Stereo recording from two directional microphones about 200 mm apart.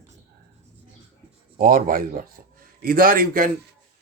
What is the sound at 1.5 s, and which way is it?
Speech, 45° right (ahead or behind).